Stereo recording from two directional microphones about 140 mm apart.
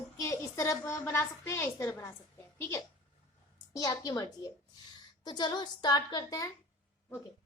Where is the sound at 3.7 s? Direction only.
25° left (ahead or behind).